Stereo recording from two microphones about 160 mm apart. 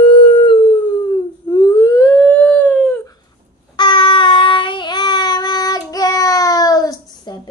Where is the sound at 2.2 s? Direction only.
5° left (ahead or behind).